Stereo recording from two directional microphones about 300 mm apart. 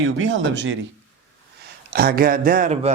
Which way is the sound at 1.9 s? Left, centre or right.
Right.